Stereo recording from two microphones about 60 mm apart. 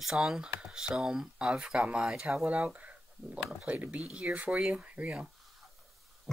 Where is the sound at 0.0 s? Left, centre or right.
Centre.